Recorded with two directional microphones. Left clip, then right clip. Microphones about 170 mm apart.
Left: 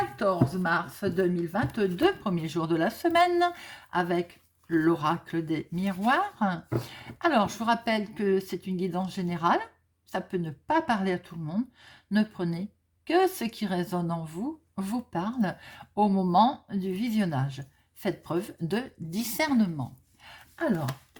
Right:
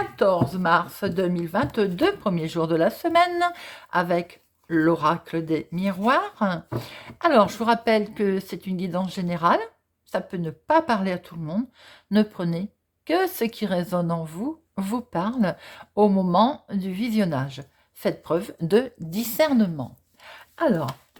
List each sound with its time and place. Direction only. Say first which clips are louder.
0.2 s a woman's voice: right 9 dB; 40° right (ahead or behind)